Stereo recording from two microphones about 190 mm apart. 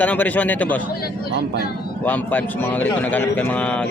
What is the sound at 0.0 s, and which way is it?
Speech, 10° left (ahead or behind).